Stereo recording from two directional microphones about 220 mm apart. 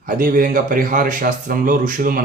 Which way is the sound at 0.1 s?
40° right (ahead or behind).